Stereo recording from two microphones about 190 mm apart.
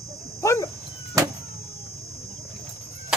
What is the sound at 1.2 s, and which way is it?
Vehicle, 15° right (ahead or behind).